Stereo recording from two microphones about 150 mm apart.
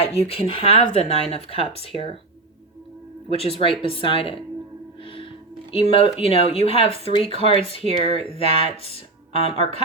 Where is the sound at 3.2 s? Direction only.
40° left (ahead or behind).